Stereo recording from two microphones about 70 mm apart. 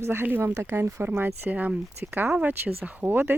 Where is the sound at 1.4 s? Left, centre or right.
Right.